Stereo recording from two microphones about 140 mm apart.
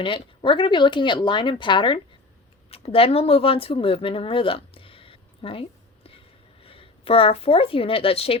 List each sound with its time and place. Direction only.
0.0 s speech: 35° left (ahead or behind)